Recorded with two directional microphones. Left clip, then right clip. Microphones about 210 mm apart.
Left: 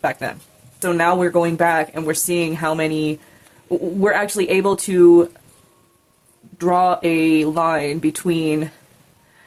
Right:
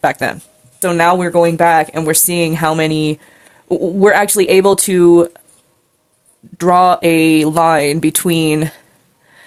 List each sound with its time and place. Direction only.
0.0 s speech: 45° right (ahead or behind)
6.6 s speech: 45° right (ahead or behind)